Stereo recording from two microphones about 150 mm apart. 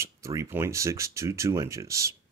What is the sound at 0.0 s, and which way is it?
Speech, 20° right (ahead or behind).